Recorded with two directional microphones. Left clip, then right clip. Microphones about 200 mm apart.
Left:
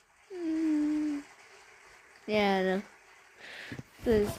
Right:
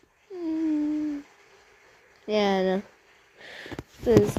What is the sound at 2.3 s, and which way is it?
Speech, centre (ahead or behind).